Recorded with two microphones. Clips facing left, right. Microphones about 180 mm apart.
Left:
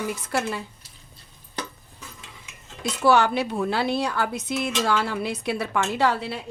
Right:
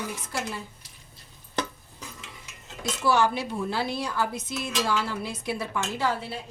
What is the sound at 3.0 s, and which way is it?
Speech, 65° left (ahead or behind).